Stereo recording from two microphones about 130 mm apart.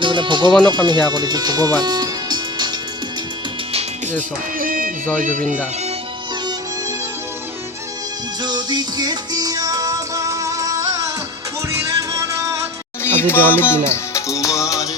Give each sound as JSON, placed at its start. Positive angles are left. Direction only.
{"t": 0.0, "sound": "music", "side_deg": -40}
{"t": 0.7, "sound": "speech", "side_deg": -35}
{"t": 3.7, "sound": "music", "side_deg": -50}
{"t": 4.5, "sound": "speech", "side_deg": -90}
{"t": 5.2, "sound": "speech", "side_deg": -80}
{"t": 8.4, "sound": "music", "side_deg": -35}
{"t": 13.0, "sound": "music", "side_deg": 20}